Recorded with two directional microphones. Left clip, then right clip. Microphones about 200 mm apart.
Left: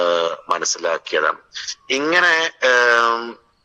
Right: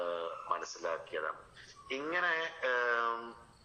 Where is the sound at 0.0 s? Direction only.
55° left (ahead or behind).